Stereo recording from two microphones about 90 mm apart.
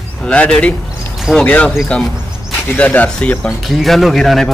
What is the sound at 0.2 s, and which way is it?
Speech, 10° left (ahead or behind).